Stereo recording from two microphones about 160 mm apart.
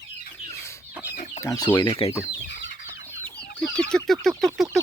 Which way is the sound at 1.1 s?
60° left (ahead or behind).